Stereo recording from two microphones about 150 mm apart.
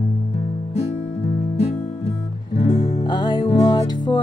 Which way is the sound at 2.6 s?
40° left (ahead or behind).